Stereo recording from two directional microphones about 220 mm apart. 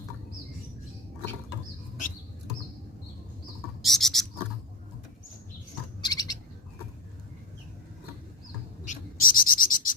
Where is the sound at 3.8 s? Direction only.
Centre (ahead or behind).